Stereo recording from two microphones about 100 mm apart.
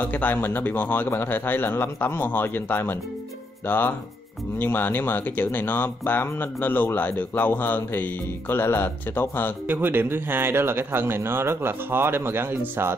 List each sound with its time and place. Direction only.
0.0 s speech: 15° left (ahead or behind)
9.7 s speech: 20° right (ahead or behind)